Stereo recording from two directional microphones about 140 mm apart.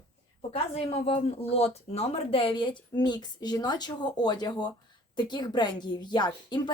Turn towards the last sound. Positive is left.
turn(degrees=30)  # may be behind; listen again after turning